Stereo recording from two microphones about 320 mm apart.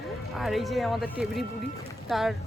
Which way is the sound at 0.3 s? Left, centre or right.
Centre.